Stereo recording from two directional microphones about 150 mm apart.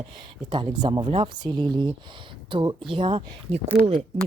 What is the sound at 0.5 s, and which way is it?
Speech, 30° right (ahead or behind).